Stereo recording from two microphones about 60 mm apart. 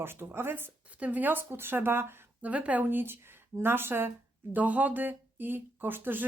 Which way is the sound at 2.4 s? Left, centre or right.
Right.